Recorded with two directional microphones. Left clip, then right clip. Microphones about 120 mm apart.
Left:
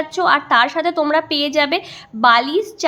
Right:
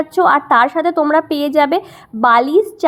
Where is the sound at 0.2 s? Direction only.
45° right (ahead or behind).